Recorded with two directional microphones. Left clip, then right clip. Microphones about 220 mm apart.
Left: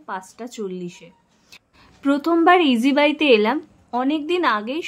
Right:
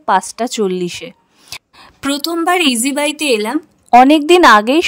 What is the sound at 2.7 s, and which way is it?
Speech, centre (ahead or behind).